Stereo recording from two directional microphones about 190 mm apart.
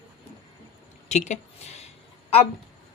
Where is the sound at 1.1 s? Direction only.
35° left (ahead or behind).